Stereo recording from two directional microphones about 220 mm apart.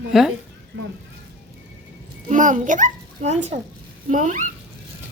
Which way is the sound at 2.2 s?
35° right (ahead or behind).